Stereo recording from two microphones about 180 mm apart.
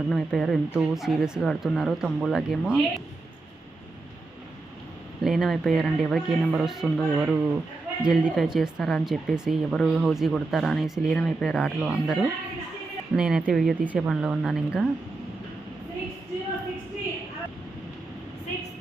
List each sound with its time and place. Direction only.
0.1 s speech: centre (ahead or behind)
5.2 s speech: centre (ahead or behind)